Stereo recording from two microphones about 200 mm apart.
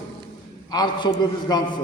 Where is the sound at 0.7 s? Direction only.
20° left (ahead or behind).